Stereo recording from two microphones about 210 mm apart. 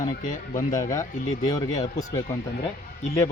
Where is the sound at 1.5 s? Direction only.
20° left (ahead or behind).